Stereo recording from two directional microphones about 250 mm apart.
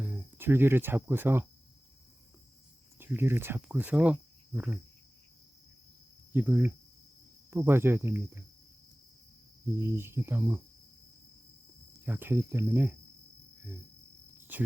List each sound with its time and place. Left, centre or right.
0.0 s speech: centre
3.0 s speech: centre
6.3 s speech: centre
9.7 s speech: centre
12.0 s speech: centre
14.3 s cricket: centre